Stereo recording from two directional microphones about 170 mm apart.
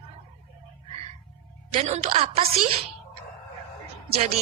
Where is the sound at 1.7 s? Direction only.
40° right (ahead or behind).